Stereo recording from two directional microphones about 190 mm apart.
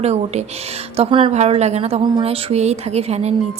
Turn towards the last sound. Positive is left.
turn(degrees=-35)  # may be behind; listen again after turning